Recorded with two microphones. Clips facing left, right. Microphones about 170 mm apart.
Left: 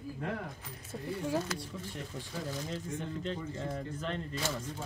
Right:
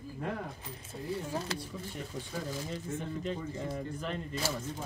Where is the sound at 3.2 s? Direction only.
10° right (ahead or behind).